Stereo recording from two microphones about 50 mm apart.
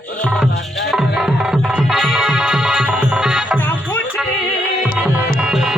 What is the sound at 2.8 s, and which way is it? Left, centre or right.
Music, right.